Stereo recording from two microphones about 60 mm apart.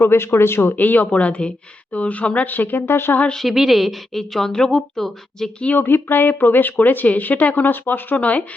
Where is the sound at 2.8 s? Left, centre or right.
Left.